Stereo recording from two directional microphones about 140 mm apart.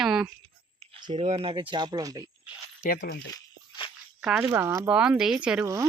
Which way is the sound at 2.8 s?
80° left.